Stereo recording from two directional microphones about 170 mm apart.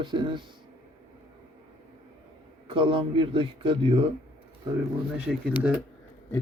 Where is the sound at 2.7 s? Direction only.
30° right (ahead or behind).